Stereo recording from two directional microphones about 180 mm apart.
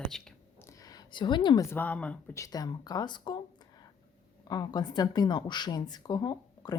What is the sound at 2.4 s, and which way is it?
Speech, 20° left (ahead or behind).